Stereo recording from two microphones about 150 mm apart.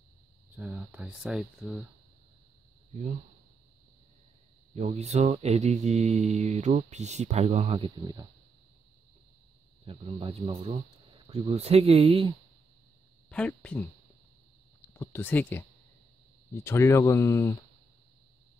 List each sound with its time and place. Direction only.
0.6 s speech: 10° right (ahead or behind)
2.9 s speech: 50° right (ahead or behind)
4.7 s mantra: 45° right (ahead or behind)
8.0 s speech: 25° right (ahead or behind)
9.8 s speech: 35° right (ahead or behind)
13.3 s speech: 5° left (ahead or behind)
15.0 s speech: 15° left (ahead or behind)
16.6 s speech: 20° left (ahead or behind)